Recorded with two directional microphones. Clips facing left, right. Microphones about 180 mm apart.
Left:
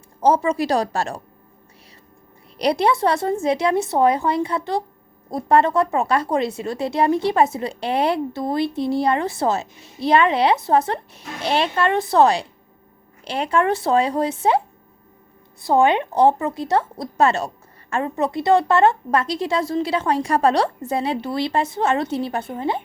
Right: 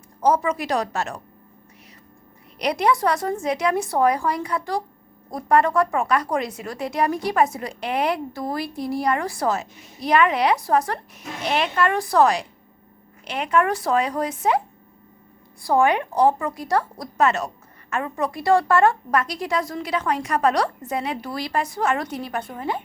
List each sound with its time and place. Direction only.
0.2 s a woman's voice: 25° left (ahead or behind)
2.6 s speech: 30° left (ahead or behind)
15.6 s speech: 25° left (ahead or behind)